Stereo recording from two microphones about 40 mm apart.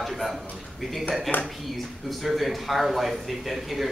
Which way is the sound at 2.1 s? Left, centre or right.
Centre.